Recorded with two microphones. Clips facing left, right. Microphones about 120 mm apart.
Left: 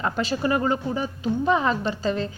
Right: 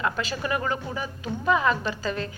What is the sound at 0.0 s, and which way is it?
A woman's voice, 35° left (ahead or behind).